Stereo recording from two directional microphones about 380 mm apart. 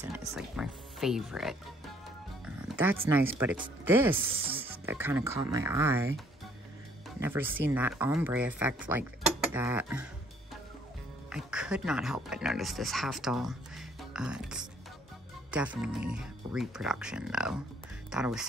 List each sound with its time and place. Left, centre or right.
0.3 s speech: centre
11.2 s speech: centre